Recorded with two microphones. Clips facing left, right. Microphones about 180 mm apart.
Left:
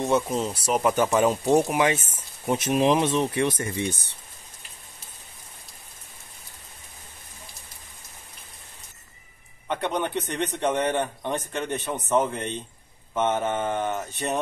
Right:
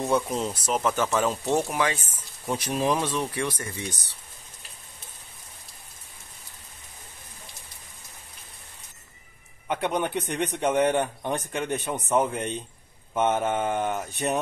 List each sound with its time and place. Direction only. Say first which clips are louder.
0.0 s speech: left 2 dB; centre (ahead or behind)
0.7 s speech: left 4 dB; 15° left (ahead or behind)
9.7 s a man's voice: even; 10° right (ahead or behind)